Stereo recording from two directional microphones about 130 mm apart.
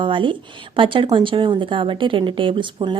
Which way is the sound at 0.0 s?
40° right (ahead or behind).